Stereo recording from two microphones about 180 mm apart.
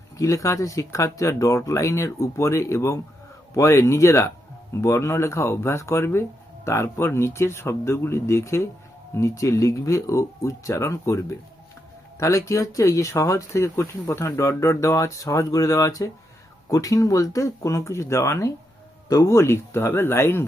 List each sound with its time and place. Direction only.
0.2 s speech: 15° left (ahead or behind)